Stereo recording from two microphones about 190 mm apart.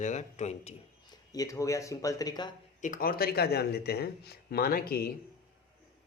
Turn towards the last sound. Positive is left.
turn(degrees=50)  # may be behind; listen again after turning